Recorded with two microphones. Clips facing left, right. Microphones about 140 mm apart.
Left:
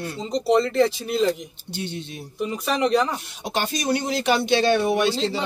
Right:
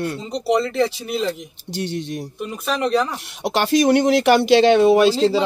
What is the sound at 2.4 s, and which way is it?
Speech, centre (ahead or behind).